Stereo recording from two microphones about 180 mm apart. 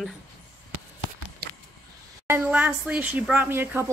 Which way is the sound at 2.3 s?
10° right (ahead or behind).